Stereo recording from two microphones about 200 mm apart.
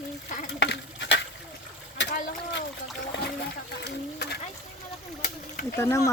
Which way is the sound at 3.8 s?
55° left (ahead or behind).